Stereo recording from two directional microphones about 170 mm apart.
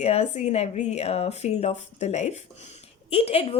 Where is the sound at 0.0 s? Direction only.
40° left (ahead or behind).